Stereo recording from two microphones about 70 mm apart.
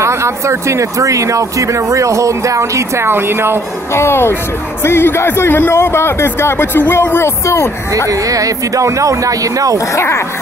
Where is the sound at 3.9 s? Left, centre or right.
Left.